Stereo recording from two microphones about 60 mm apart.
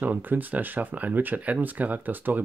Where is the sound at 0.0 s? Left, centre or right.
Right.